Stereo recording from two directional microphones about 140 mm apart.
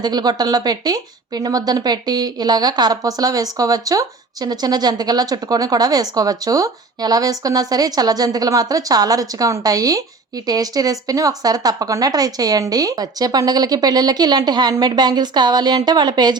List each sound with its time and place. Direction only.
0.0 s a woman's voice: 30° right (ahead or behind)